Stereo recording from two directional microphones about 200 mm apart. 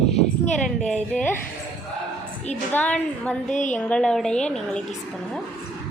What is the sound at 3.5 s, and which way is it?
Speech, 40° left (ahead or behind).